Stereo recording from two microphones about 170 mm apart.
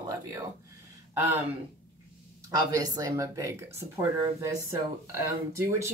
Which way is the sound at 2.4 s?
20° right (ahead or behind).